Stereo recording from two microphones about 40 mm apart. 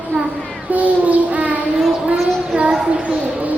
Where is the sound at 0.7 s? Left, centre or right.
Right.